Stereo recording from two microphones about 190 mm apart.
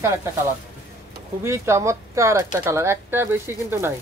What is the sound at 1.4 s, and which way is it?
Speech, 15° right (ahead or behind).